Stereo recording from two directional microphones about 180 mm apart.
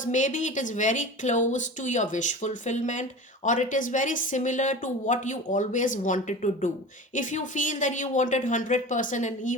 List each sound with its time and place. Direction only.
0.0 s speech: 45° left (ahead or behind)